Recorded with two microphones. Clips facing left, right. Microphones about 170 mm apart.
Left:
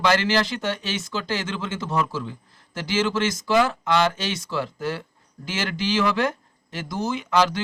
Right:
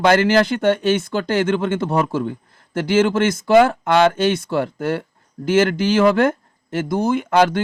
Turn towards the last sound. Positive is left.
turn(degrees=-55)  # may be behind; listen again after turning